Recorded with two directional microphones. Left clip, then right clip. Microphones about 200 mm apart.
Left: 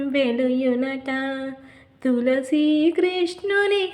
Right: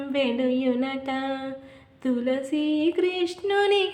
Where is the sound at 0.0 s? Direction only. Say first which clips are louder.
Left 3 dB; 15° left (ahead or behind).